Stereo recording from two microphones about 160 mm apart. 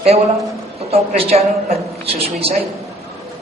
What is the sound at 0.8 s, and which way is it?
A woman's voice, 40° right (ahead or behind).